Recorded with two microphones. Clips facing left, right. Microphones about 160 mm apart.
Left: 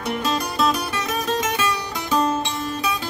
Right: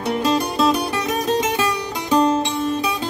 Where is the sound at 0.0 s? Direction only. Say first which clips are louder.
Right 5 dB; 25° right (ahead or behind).